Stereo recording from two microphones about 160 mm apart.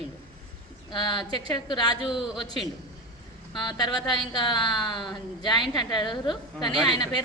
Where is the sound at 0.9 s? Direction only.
30° left (ahead or behind).